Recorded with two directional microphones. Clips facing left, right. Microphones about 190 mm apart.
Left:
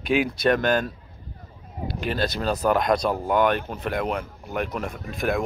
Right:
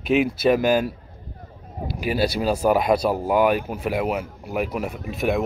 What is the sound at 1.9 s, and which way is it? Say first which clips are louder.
Speech: right 4 dB; 10° right (ahead or behind).